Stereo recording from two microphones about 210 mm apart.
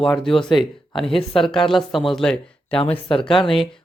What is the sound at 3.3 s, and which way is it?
Speech, 25° left (ahead or behind).